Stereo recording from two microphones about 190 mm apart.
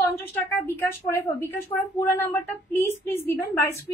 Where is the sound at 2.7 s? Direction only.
10° left (ahead or behind).